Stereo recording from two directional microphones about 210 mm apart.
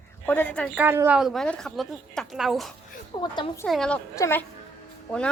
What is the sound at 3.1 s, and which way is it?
Speech, 20° left (ahead or behind).